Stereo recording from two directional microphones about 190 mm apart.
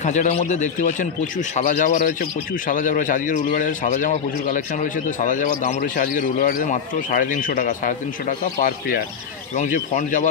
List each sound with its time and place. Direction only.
0.0 s a man's voice: 40° left (ahead or behind)
9.6 s a man's voice: 40° left (ahead or behind)